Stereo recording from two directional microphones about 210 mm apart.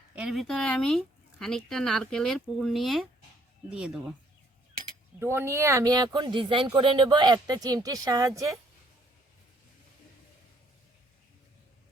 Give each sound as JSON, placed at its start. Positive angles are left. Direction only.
{"t": 0.2, "sound": "speech", "side_deg": 0}
{"t": 5.2, "sound": "speech", "side_deg": -10}